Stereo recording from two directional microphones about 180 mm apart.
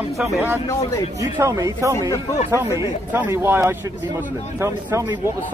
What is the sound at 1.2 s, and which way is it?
Speech, 15° right (ahead or behind).